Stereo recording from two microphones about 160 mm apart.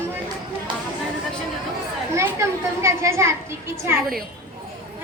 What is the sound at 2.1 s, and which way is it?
A child's voice, 15° right (ahead or behind).